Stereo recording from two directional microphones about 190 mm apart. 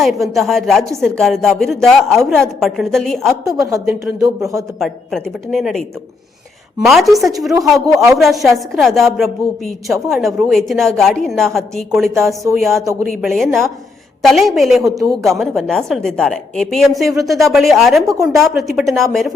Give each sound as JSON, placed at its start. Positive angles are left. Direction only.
{"t": 0.0, "sound": "a woman's voice", "side_deg": 0}
{"t": 3.6, "sound": "speech", "side_deg": -15}
{"t": 4.8, "sound": "a woman's voice", "side_deg": 0}
{"t": 6.8, "sound": "a woman's voice", "side_deg": 0}
{"t": 12.7, "sound": "speech", "side_deg": -15}
{"t": 13.1, "sound": "a woman's voice", "side_deg": 0}
{"t": 14.8, "sound": "speech", "side_deg": -20}
{"t": 15.2, "sound": "a woman's voice", "side_deg": 0}
{"t": 18.0, "sound": "speech", "side_deg": -15}
{"t": 18.3, "sound": "a woman's voice", "side_deg": 0}